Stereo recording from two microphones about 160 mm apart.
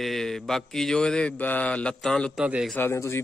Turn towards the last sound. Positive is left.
turn(degrees=15)  # may be behind; listen again after turning